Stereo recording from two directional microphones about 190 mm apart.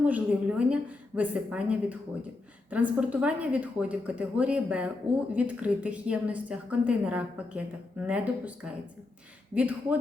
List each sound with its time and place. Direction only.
0.0 s a woman's voice: 5° right (ahead or behind)
9.6 s a woman's voice: 10° right (ahead or behind)